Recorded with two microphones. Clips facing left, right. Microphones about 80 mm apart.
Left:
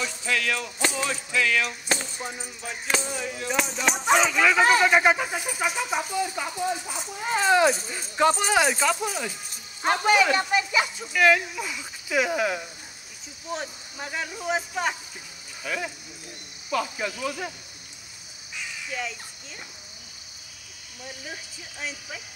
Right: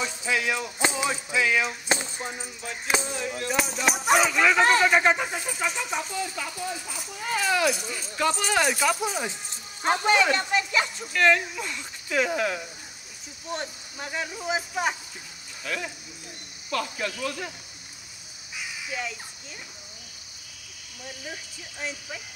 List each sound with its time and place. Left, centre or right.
0.0 s music: centre
3.3 s speech: centre; by 8.5 s left
8.8 s music: centre
10.0 s speech: centre
15.6 s speech: centre
18.6 s crow: centre
21.7 s speech: centre